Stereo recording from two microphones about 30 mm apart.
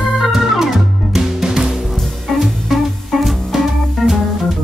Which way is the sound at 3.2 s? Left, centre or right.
Centre.